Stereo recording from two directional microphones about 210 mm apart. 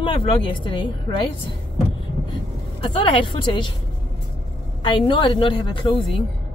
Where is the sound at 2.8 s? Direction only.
25° left (ahead or behind).